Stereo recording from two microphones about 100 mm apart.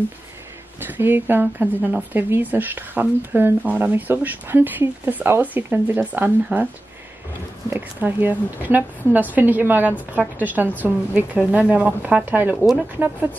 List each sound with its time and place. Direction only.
0.7 s speech: 20° right (ahead or behind)
7.7 s a woman's voice: 20° right (ahead or behind)